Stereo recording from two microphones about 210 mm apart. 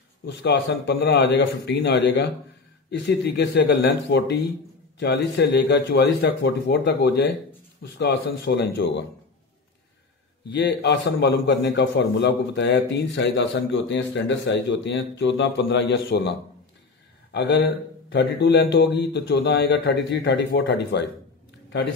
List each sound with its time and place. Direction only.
0.2 s a man's voice: 55° left (ahead or behind)
10.5 s a man's voice: 55° left (ahead or behind)